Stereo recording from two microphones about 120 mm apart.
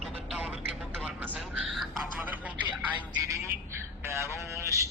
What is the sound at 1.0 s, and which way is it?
Vehicle, 15° right (ahead or behind).